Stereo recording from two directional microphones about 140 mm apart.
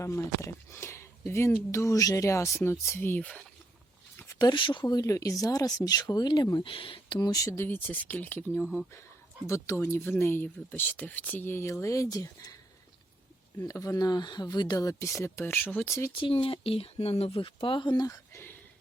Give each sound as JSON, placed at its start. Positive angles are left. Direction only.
{"t": 0.0, "sound": "speech", "side_deg": 20}
{"t": 4.4, "sound": "speech", "side_deg": 30}
{"t": 8.6, "sound": "speech", "side_deg": -5}
{"t": 9.5, "sound": "speech", "side_deg": 20}
{"t": 13.6, "sound": "speech", "side_deg": 25}
{"t": 16.1, "sound": "speech", "side_deg": 40}